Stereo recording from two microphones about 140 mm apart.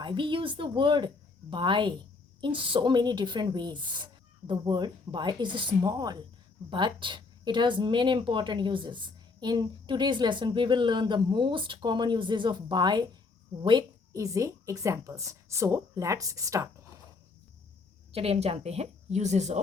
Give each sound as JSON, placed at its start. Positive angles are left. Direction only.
{"t": 0.0, "sound": "a woman's voice", "side_deg": -35}
{"t": 18.1, "sound": "a woman's voice", "side_deg": -45}